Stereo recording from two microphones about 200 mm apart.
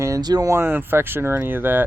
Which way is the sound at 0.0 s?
15° right (ahead or behind).